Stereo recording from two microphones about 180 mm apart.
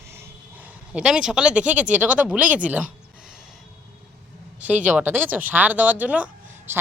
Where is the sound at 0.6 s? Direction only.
5° right (ahead or behind).